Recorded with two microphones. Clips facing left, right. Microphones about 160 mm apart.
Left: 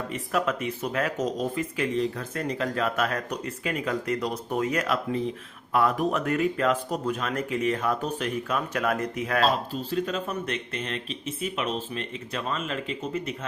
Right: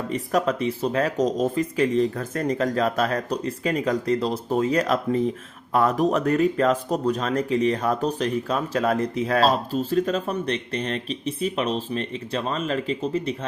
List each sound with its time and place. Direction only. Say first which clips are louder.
0.1 s speech: right 5 dB; 35° right (ahead or behind)